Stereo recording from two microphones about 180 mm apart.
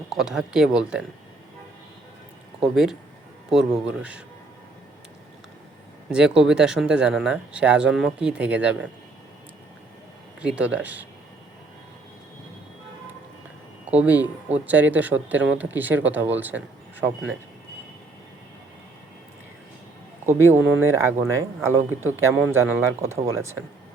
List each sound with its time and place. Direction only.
0.2 s speech: 5° right (ahead or behind)
2.6 s speech: centre (ahead or behind)
6.1 s speech: 5° right (ahead or behind)
10.4 s speech: 5° right (ahead or behind)
13.8 s speech: 10° right (ahead or behind)
20.2 s speech: 10° right (ahead or behind)